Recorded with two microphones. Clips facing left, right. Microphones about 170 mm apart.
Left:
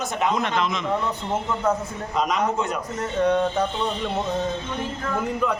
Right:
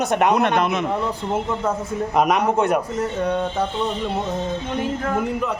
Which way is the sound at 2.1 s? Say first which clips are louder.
Right 4 dB; 60° right (ahead or behind).